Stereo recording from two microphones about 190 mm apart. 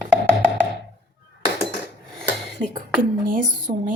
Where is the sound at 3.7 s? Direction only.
40° right (ahead or behind).